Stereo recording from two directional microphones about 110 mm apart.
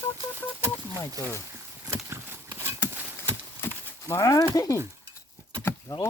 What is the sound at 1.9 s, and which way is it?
Horse, 25° right (ahead or behind).